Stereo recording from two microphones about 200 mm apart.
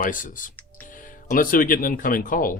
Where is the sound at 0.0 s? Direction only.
40° left (ahead or behind).